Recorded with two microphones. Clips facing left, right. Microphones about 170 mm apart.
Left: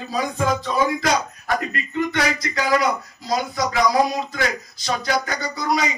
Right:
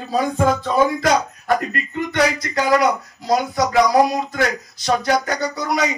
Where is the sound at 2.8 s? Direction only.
70° right (ahead or behind).